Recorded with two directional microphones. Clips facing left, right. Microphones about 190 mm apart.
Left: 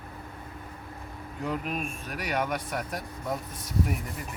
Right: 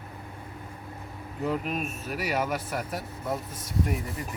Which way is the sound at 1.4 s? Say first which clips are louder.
Right 2 dB; centre (ahead or behind).